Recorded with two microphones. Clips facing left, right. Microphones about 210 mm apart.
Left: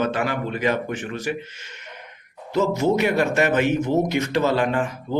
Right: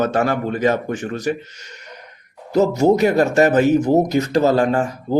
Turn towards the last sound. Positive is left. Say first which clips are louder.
# right 4 dB
turn(degrees=-40)  # may be behind; listen again after turning